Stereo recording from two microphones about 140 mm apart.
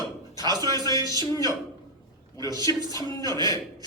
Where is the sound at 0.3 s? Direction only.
30° right (ahead or behind).